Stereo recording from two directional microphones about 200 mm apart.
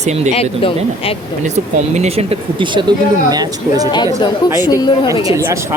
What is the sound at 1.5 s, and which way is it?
Speech, 35° right (ahead or behind).